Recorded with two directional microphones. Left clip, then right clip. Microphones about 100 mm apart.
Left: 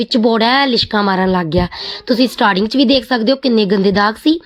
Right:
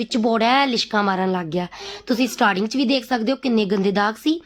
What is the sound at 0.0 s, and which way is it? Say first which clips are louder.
Speech: left 6 dB; 25° left (ahead or behind).